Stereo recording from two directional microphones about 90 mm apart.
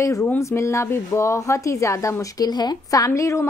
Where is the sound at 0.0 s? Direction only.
35° left (ahead or behind).